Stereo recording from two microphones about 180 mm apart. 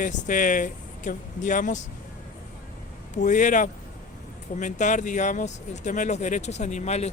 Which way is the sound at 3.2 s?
45° left (ahead or behind).